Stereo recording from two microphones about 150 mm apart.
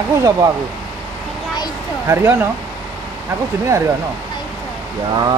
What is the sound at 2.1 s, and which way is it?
Speech, 15° right (ahead or behind).